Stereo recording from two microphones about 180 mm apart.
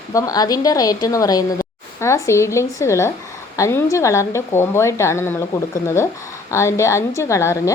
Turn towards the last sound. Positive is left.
turn(degrees=15)  # may be behind; listen again after turning